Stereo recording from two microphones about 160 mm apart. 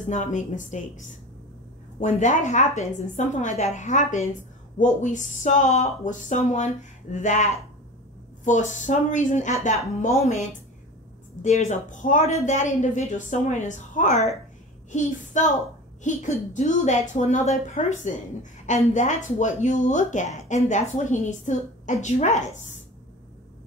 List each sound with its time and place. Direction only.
0.0 s a woman's voice: 50° left (ahead or behind)
11.4 s a woman's voice: 45° left (ahead or behind)